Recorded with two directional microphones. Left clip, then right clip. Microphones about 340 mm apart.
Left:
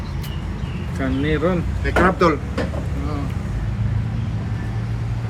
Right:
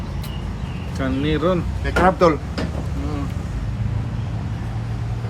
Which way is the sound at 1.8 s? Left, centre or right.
Right.